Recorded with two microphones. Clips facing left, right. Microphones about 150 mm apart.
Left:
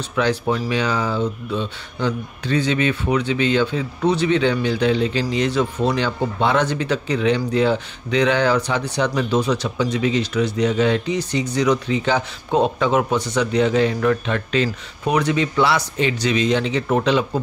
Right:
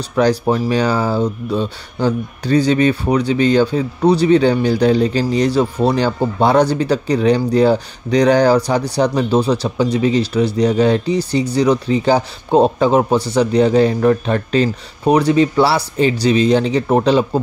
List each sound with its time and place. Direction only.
0.1 s speech: 40° right (ahead or behind)